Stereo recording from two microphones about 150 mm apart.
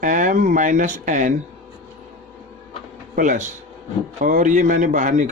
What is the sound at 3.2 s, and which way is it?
A man's voice, 55° right (ahead or behind).